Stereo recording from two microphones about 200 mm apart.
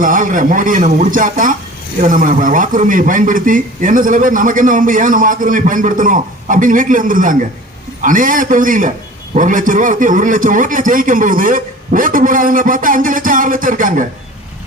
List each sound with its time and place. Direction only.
0.0 s speech: 40° right (ahead or behind)